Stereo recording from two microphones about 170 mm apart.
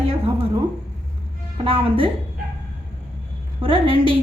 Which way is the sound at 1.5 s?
35° right (ahead or behind).